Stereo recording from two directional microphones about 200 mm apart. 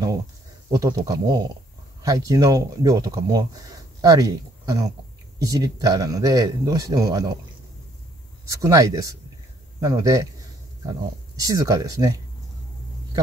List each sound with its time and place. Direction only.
0.7 s speech: 20° right (ahead or behind)
8.5 s speech: 15° right (ahead or behind)